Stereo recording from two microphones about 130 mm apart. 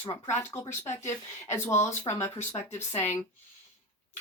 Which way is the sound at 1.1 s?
20° left (ahead or behind).